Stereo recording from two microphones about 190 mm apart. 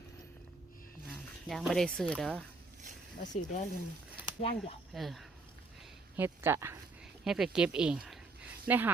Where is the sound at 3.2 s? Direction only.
40° left (ahead or behind).